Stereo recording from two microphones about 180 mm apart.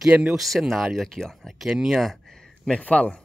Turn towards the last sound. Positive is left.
turn(degrees=5)  # may be behind; listen again after turning